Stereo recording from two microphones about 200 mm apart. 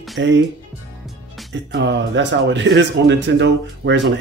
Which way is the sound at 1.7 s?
60° right (ahead or behind).